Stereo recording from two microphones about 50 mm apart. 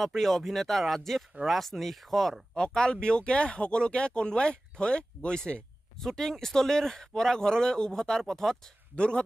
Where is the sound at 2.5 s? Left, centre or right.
Centre.